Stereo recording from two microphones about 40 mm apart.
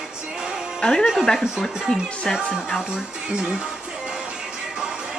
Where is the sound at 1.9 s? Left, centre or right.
Left.